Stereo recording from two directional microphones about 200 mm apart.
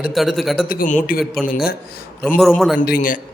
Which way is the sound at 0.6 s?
45° left (ahead or behind).